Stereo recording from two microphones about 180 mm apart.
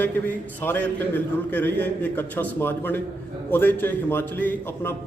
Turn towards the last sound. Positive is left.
turn(degrees=15)  # may be behind; listen again after turning